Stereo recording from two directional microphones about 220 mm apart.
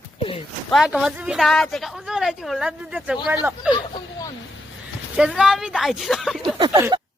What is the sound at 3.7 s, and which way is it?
Speech, 15° left (ahead or behind).